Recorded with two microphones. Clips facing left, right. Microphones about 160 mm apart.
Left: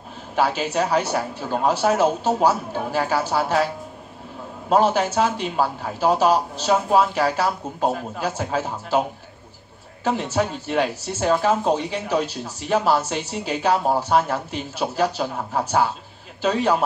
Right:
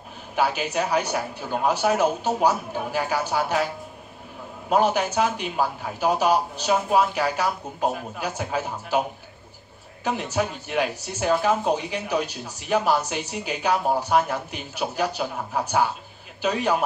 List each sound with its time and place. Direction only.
0.7 s speech: 35° left (ahead or behind)
4.6 s speech: 35° left (ahead or behind)
10.0 s speech: 35° left (ahead or behind)